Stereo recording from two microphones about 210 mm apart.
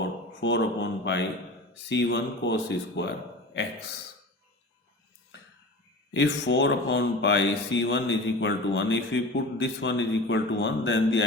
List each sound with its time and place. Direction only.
0.3 s speech: 60° left (ahead or behind)
6.1 s speech: 60° left (ahead or behind)